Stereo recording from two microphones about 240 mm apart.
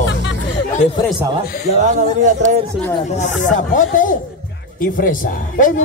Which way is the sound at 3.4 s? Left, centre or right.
Left.